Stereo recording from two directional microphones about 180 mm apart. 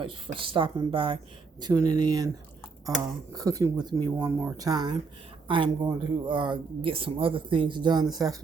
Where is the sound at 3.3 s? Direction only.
20° right (ahead or behind).